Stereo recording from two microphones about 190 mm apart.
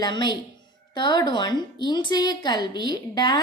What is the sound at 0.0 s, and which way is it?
A woman's voice, 25° left (ahead or behind).